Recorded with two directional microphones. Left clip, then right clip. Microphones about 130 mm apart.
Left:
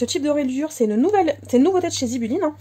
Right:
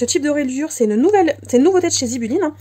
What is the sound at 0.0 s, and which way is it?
Speech, 40° right (ahead or behind).